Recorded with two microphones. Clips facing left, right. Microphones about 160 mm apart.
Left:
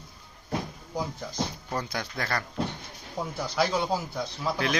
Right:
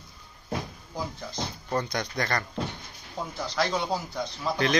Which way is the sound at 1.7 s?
5° left (ahead or behind).